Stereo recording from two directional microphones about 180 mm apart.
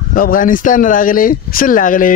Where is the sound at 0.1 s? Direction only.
50° left (ahead or behind).